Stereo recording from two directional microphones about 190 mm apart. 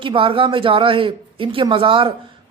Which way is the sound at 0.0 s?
25° right (ahead or behind).